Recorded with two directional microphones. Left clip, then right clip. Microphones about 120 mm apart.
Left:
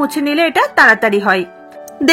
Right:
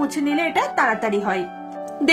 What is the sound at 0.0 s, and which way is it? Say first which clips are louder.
A woman's voice: left 7 dB; 40° left (ahead or behind).